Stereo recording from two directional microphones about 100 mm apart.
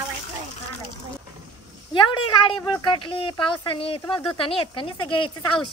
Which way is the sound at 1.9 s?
55° left (ahead or behind).